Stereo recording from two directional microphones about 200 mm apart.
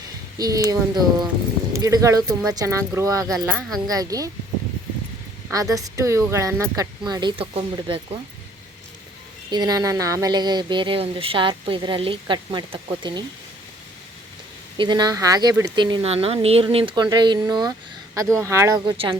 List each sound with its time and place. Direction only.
0.3 s speech: 20° right (ahead or behind)
5.5 s speech: 15° right (ahead or behind)
9.5 s speech: 20° right (ahead or behind)
14.8 s speech: 20° right (ahead or behind)